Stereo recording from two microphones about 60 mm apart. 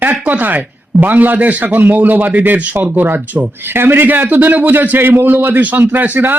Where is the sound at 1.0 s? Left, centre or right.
Right.